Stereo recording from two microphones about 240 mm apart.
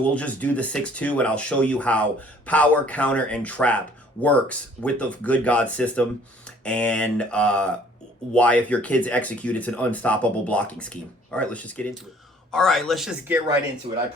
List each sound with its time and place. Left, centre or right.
0.0 s speech: centre
13.9 s speech: right